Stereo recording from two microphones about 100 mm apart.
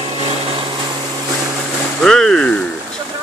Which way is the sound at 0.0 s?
75° right (ahead or behind).